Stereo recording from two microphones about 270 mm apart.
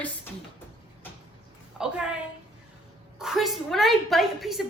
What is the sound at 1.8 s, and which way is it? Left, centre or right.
Speech, centre.